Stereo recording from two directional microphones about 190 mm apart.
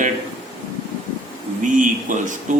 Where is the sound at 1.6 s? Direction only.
40° right (ahead or behind).